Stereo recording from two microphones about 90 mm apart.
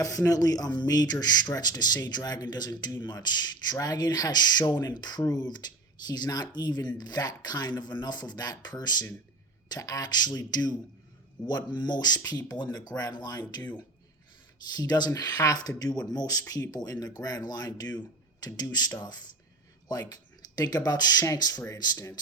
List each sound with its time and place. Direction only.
0.0 s speech: 40° left (ahead or behind)
14.8 s speech: 50° left (ahead or behind)
19.9 s speech: 45° left (ahead or behind)